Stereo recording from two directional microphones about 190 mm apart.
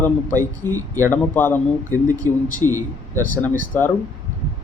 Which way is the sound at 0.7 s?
15° right (ahead or behind).